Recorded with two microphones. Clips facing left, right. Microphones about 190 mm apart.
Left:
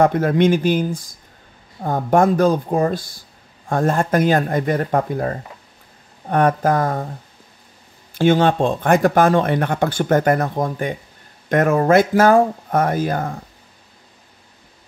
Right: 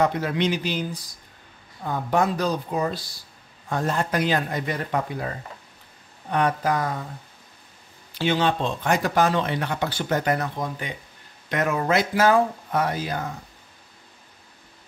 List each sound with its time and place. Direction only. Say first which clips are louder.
0.0 s speech: left 7 dB; 50° left (ahead or behind)
8.1 s speech: left 7 dB; 50° left (ahead or behind)